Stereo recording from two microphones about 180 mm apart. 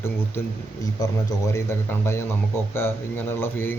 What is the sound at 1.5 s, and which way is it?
A man's voice, 15° left (ahead or behind).